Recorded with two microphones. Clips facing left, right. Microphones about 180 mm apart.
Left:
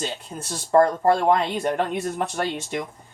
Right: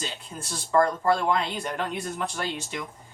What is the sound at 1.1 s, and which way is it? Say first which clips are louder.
Speech: left 5 dB; 55° left (ahead or behind).